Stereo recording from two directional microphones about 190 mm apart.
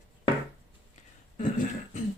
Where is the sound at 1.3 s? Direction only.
45° left (ahead or behind).